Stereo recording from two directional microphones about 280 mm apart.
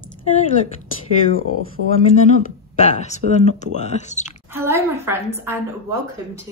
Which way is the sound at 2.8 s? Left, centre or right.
Left.